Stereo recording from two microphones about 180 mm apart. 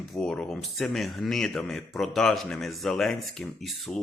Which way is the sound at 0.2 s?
5° left (ahead or behind).